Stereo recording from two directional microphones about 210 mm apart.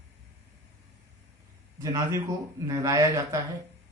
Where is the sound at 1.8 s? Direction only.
15° right (ahead or behind).